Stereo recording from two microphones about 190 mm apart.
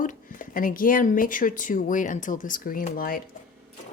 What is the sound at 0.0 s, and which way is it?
Speech, 45° left (ahead or behind).